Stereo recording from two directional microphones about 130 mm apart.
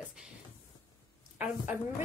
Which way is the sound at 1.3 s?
10° right (ahead or behind).